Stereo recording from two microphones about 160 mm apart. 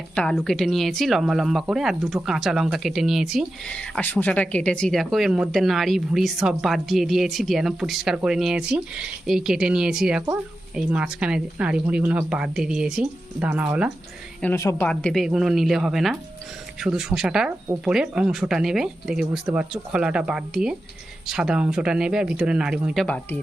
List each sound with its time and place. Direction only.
0.2 s a woman's voice: 5° left (ahead or behind)
14.4 s a woman's voice: 20° left (ahead or behind)
14.8 s speech: 5° left (ahead or behind)
23.0 s a woman's voice: 10° left (ahead or behind)